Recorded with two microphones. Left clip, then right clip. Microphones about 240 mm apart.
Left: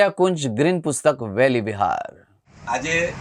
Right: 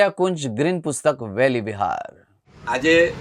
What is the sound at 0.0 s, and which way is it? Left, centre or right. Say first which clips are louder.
Speech: left 1 dB; centre.